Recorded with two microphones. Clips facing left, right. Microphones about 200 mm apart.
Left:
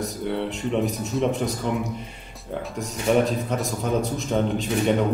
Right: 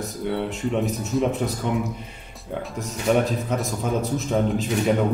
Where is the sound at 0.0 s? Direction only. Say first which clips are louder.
Even; centre (ahead or behind).